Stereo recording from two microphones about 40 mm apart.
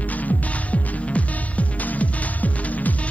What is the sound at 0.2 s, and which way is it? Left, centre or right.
Music, left.